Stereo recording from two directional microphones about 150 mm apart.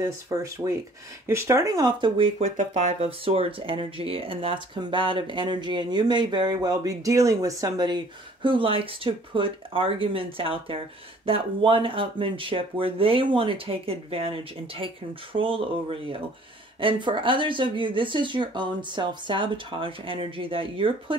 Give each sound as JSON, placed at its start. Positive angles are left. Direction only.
{"t": 0.0, "sound": "speech", "side_deg": -20}
{"t": 2.5, "sound": "speech", "side_deg": -55}